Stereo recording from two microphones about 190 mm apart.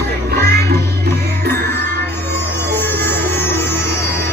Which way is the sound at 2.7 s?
60° right (ahead or behind).